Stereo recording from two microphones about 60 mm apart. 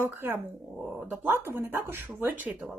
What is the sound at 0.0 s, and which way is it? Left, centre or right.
Speech, right.